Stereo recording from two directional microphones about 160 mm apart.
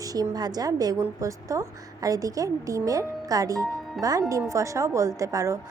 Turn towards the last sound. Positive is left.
turn(degrees=-20)  # may be behind; listen again after turning